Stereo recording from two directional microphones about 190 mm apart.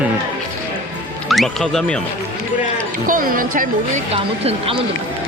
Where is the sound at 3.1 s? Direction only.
45° right (ahead or behind).